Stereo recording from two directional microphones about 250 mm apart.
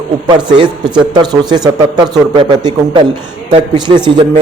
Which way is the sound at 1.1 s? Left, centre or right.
Centre.